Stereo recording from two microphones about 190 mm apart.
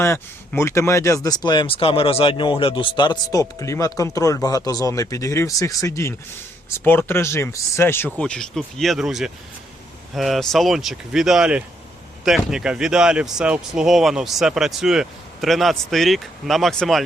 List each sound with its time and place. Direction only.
0.0 s speech: 15° left (ahead or behind)